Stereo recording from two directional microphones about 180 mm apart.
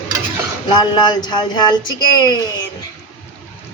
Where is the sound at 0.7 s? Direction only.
25° left (ahead or behind).